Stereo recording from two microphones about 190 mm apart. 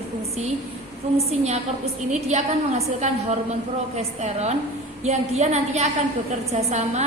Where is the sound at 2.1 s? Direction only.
35° right (ahead or behind).